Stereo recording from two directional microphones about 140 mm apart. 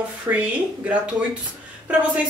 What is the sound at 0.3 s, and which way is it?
Speech, 15° right (ahead or behind).